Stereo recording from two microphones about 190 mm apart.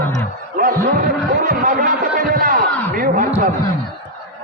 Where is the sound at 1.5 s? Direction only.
45° right (ahead or behind).